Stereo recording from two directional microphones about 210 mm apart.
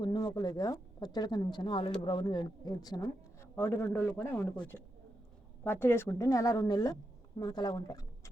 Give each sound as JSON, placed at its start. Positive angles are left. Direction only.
{"t": 0.0, "sound": "speech", "side_deg": 20}
{"t": 5.6, "sound": "speech", "side_deg": 10}